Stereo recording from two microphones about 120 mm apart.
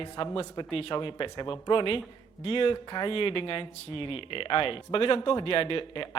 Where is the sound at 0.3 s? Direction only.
45° left (ahead or behind).